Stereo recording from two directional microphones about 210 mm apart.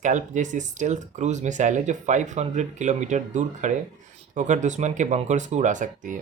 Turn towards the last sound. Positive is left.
turn(degrees=-35)  # may be behind; listen again after turning